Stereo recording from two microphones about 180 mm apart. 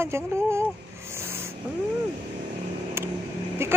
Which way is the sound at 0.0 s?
15° right (ahead or behind).